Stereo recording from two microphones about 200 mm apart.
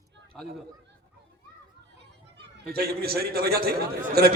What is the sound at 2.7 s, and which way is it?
A man's voice, 50° right (ahead or behind).